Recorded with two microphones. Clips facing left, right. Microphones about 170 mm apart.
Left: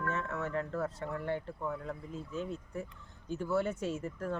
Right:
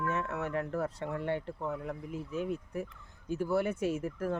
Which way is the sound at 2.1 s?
70° right (ahead or behind).